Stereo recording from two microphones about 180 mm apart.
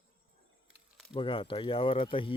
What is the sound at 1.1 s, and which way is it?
Speech, 30° left (ahead or behind).